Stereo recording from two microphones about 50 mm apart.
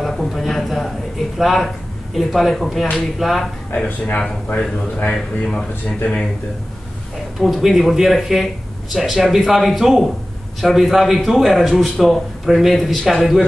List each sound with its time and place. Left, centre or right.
0.0 s a sound: centre
1.4 s a man's voice: centre
3.7 s speech: left
5.1 s speech: centre
7.3 s a man's voice: centre